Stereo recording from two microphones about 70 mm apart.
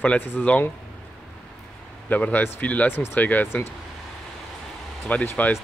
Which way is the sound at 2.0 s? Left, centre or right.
Left.